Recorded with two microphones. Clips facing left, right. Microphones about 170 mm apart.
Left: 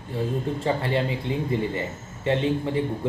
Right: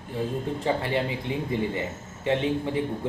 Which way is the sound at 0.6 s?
20° right (ahead or behind).